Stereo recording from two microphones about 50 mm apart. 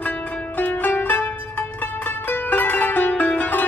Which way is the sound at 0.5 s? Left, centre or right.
Left.